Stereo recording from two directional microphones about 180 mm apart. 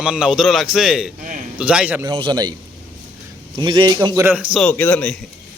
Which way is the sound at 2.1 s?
25° right (ahead or behind).